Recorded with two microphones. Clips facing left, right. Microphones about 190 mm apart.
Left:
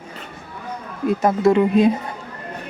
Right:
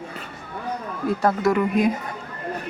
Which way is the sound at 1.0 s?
20° left (ahead or behind).